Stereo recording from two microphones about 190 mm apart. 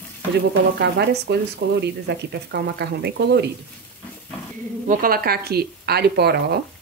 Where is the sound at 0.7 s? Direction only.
60° right (ahead or behind).